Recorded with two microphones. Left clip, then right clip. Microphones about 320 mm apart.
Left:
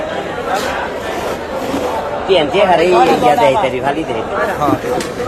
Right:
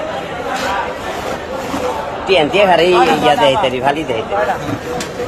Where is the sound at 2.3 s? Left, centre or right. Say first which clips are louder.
Right 1 dB; right.